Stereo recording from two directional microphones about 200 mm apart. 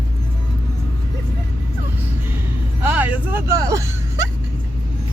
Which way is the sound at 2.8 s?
5° right (ahead or behind).